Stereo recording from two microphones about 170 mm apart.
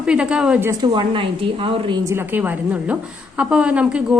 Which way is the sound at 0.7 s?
25° right (ahead or behind).